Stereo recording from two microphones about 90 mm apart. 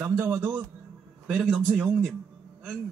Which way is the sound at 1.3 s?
10° right (ahead or behind).